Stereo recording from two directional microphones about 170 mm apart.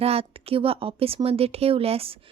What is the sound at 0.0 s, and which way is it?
Speech, 35° right (ahead or behind).